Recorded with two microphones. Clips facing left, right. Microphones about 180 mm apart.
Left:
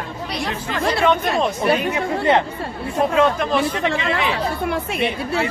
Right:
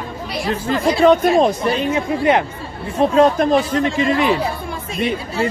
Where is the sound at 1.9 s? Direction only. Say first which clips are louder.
Right 2 dB; 15° right (ahead or behind).